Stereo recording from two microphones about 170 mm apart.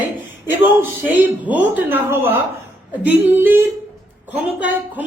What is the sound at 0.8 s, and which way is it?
A woman's voice, 10° right (ahead or behind).